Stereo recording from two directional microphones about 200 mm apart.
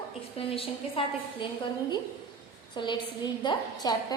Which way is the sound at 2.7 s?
20° left (ahead or behind).